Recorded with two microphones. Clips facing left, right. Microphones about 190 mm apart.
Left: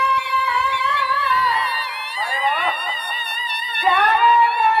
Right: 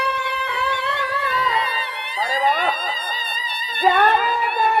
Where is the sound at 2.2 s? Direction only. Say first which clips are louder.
Right 3 dB; 45° right (ahead or behind).